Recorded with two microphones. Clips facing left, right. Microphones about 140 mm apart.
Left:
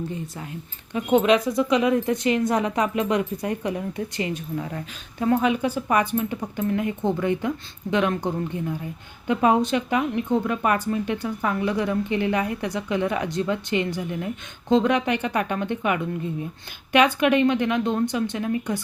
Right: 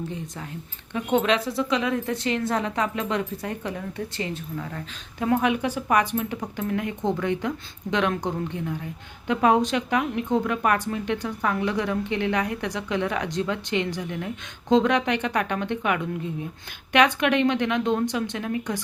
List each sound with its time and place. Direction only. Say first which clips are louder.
0.9 s speech: left 4 dB; 10° left (ahead or behind)
5.2 s a woman's voice: left 2 dB; centre (ahead or behind)